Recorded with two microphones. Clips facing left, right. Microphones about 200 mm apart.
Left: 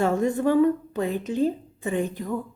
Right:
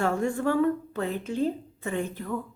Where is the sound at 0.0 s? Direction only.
20° left (ahead or behind).